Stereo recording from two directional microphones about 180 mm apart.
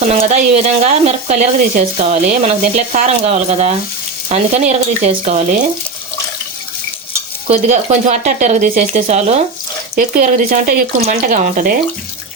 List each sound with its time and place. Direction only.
0.0 s speech: 40° right (ahead or behind)
7.4 s speech: 40° right (ahead or behind)